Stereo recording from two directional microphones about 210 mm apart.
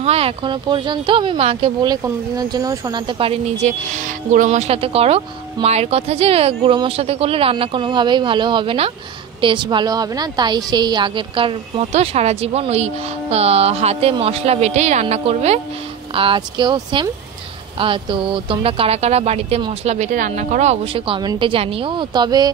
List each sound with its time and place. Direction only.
0.0 s speech: 30° right (ahead or behind)